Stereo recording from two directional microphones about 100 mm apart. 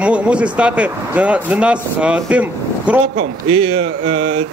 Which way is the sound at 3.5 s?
60° right (ahead or behind).